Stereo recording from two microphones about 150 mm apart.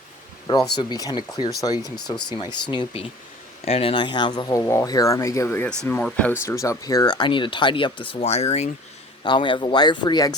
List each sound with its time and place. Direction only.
0.4 s speech: 25° left (ahead or behind); by 6.3 s 10° left (ahead or behind)
6.4 s speech: 20° left (ahead or behind); by 8.7 s 45° left (ahead or behind)
9.2 s speech: 30° left (ahead or behind)